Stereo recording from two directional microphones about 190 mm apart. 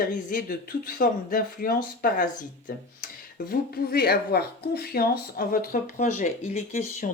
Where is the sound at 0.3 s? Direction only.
50° left (ahead or behind).